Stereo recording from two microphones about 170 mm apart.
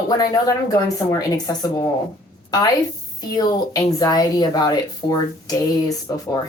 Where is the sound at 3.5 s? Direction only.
20° left (ahead or behind).